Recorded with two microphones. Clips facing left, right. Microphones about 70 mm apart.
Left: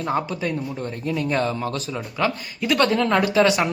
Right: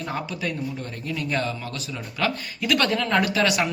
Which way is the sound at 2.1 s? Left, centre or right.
Left.